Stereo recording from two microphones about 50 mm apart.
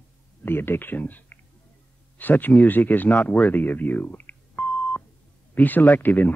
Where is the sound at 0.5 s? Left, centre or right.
Left.